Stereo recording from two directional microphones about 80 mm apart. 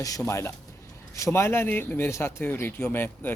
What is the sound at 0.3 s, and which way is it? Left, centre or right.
Speech, left.